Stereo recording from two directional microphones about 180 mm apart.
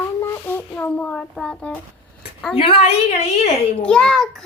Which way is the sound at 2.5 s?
30° left (ahead or behind).